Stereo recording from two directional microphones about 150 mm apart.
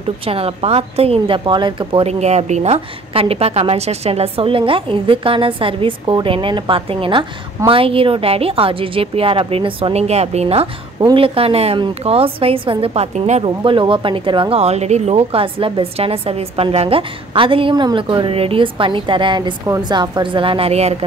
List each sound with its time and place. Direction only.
0.3 s a woman's voice: 40° right (ahead or behind)